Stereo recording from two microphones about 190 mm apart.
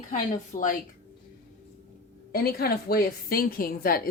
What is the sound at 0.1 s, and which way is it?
Speech, 40° left (ahead or behind).